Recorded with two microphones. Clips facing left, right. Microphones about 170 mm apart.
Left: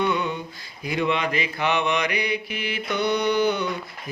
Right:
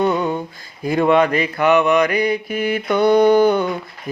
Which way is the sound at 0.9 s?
50° right (ahead or behind).